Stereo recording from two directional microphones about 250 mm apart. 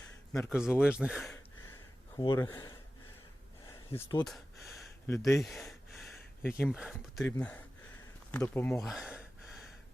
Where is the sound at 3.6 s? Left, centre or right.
Centre.